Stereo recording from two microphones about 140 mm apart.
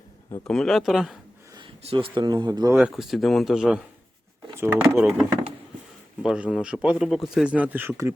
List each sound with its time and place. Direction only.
0.4 s speech: 5° left (ahead or behind)
1.8 s speech: 45° right (ahead or behind); by 2.7 s 25° right (ahead or behind)
2.9 s speech: centre (ahead or behind)
6.2 s speech: 5° right (ahead or behind)